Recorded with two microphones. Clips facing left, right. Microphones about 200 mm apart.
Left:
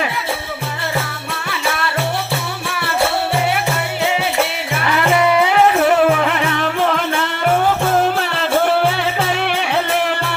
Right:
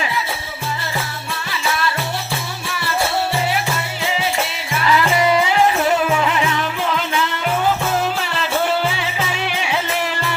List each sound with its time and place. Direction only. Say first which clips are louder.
4.7 s music: right 1 dB; 55° left (ahead or behind)